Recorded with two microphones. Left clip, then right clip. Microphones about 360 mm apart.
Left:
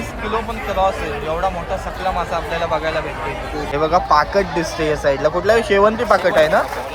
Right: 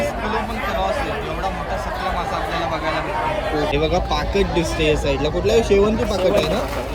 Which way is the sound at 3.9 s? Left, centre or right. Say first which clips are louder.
Left 7 dB; centre.